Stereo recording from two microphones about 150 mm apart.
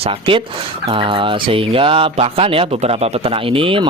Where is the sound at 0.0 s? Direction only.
35° right (ahead or behind).